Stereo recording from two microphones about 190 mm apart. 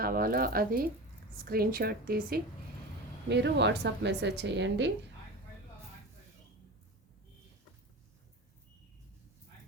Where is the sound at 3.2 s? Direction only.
65° right (ahead or behind).